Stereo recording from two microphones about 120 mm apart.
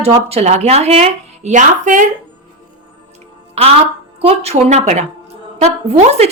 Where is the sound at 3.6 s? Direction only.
60° right (ahead or behind).